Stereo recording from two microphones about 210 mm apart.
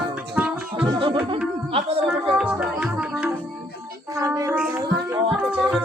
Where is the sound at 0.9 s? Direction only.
25° right (ahead or behind).